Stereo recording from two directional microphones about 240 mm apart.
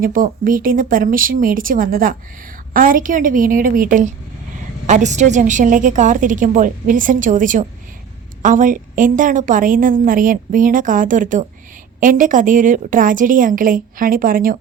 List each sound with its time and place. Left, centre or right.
0.0 s a woman's voice: right